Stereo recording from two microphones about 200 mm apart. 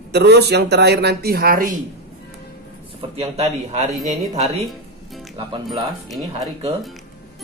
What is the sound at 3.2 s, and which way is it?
A man's voice, 30° right (ahead or behind).